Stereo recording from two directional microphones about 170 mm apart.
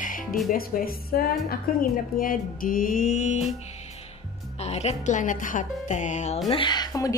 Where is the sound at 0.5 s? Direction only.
60° left (ahead or behind).